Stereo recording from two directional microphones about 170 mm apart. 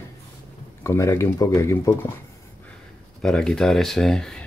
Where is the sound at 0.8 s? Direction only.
15° left (ahead or behind).